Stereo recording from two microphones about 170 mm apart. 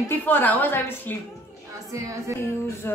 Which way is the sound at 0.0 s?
10° left (ahead or behind).